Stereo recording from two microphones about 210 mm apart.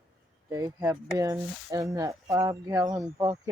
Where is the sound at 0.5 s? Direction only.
15° right (ahead or behind).